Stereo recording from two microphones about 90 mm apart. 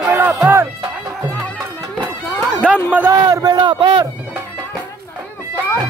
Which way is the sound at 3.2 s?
45° right (ahead or behind).